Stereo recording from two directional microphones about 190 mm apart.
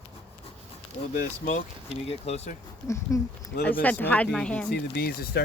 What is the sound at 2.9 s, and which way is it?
Speech, 15° left (ahead or behind).